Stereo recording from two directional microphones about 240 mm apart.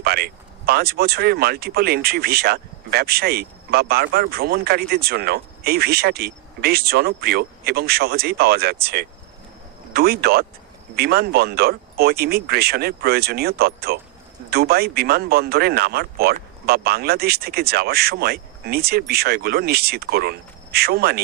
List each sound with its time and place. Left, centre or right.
0.0 s speech: right